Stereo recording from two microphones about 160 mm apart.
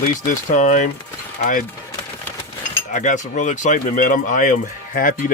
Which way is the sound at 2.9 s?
50° left (ahead or behind).